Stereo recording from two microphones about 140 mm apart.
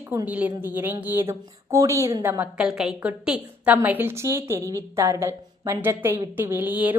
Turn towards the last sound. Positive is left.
turn(degrees=-10)  # may be behind; listen again after turning